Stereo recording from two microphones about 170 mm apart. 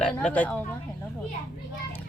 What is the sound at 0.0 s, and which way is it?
Speech, 5° left (ahead or behind).